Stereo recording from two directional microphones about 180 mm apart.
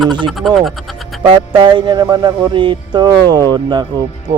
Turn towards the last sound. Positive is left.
turn(degrees=-25)  # may be behind; listen again after turning